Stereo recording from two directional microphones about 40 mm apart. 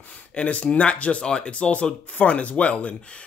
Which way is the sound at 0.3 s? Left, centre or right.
Left.